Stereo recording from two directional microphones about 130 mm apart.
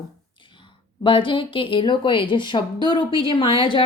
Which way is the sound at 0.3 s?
40° left (ahead or behind).